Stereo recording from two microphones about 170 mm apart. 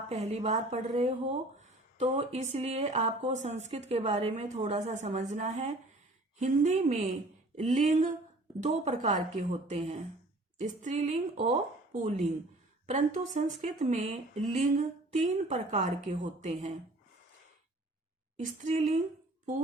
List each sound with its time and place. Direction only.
0.1 s a woman's voice: 40° right (ahead or behind)
18.3 s speech: 50° right (ahead or behind)